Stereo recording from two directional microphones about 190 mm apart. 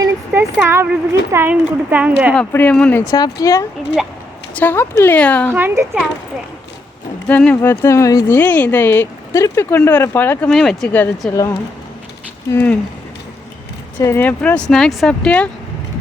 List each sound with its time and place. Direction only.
0.0 s speech: 10° right (ahead or behind)
2.3 s speech: 5° left (ahead or behind)
3.1 s speech: 20° left (ahead or behind)
5.5 s speech: 10° right (ahead or behind)
7.3 s speech: 10° left (ahead or behind)
14.0 s speech: 10° left (ahead or behind)